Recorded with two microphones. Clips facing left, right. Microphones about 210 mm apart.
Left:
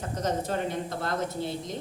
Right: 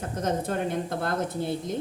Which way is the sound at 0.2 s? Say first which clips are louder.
Right 1 dB; 55° right (ahead or behind).